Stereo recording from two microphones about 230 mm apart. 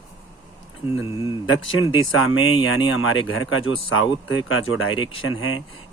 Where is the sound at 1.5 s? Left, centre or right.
Left.